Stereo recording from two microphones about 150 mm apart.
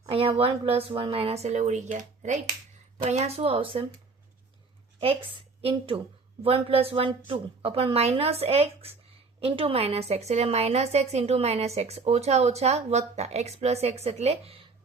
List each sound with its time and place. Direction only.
0.1 s speech: 40° right (ahead or behind)
5.6 s a woman's voice: 35° right (ahead or behind)